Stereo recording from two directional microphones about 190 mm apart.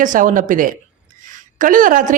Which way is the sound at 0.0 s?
45° right (ahead or behind).